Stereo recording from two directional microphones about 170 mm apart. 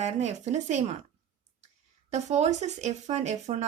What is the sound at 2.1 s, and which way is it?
Speech, 40° right (ahead or behind).